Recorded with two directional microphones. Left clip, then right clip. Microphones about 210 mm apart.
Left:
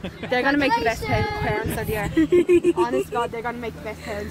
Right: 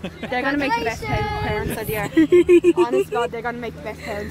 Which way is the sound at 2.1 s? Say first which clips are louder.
Right 4 dB; 45° right (ahead or behind).